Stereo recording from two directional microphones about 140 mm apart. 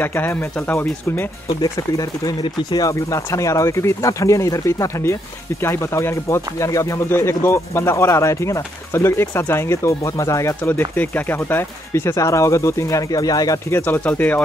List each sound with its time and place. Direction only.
0.0 s speech: 15° left (ahead or behind)
1.6 s speech: 25° left (ahead or behind)